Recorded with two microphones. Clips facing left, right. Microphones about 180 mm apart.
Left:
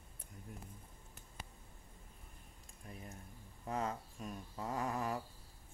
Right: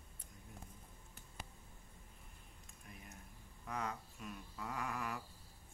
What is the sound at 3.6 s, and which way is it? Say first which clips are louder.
Speech: left 4 dB; 30° left (ahead or behind).